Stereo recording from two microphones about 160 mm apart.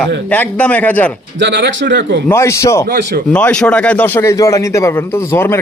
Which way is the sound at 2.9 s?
75° right (ahead or behind).